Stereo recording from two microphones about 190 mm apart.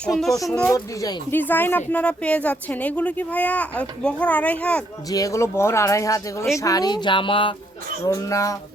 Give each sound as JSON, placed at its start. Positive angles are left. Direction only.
{"t": 0.0, "sound": "speech", "side_deg": 0}
{"t": 5.0, "sound": "speech", "side_deg": 20}